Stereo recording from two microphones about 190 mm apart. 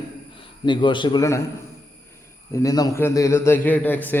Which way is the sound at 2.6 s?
20° left (ahead or behind).